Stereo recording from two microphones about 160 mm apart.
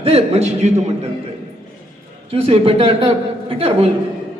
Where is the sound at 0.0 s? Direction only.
40° right (ahead or behind).